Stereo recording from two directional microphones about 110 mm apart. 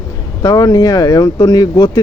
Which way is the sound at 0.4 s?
35° left (ahead or behind).